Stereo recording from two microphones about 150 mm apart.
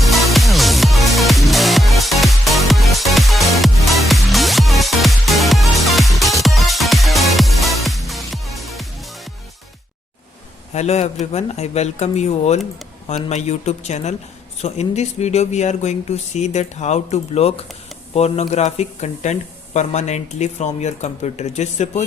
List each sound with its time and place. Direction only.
0.0 s music: centre (ahead or behind)
10.8 s speech: 45° left (ahead or behind)